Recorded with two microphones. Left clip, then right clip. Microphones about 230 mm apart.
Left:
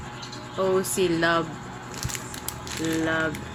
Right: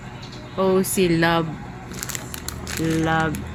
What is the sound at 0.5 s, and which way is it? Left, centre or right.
Speech, right.